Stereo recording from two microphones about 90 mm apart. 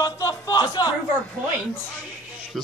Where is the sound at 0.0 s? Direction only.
40° left (ahead or behind).